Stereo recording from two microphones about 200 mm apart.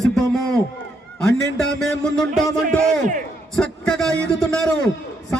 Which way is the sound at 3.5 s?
5° left (ahead or behind).